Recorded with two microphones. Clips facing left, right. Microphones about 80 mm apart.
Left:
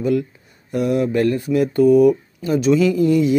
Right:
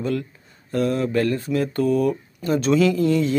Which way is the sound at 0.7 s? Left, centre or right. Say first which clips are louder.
Left 3 dB; centre.